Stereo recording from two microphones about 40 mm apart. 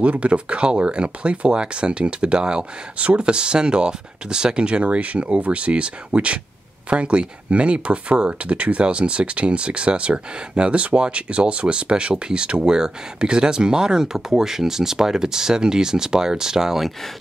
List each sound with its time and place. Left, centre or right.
0.0 s speech: right; by 16.8 s centre